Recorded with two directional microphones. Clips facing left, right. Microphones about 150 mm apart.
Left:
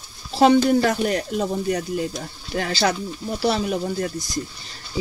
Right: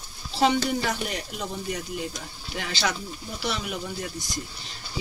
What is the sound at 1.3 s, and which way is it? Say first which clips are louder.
Speech: left 9 dB; 40° left (ahead or behind).